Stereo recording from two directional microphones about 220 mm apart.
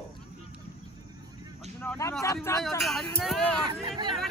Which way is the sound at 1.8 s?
10° left (ahead or behind).